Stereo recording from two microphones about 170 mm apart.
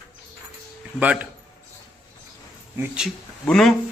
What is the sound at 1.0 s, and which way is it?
Speech, 5° right (ahead or behind).